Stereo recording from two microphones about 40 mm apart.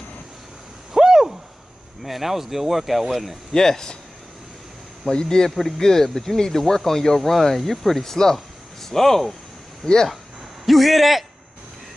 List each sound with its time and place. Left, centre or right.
0.9 s owl: centre
2.0 s speech: centre
3.5 s speech: centre
5.1 s speech: centre
5.5 s speech: centre